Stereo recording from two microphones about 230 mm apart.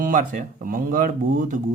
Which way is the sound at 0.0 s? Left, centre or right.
Right.